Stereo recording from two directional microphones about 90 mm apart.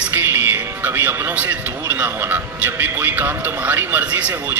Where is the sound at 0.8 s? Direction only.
25° right (ahead or behind).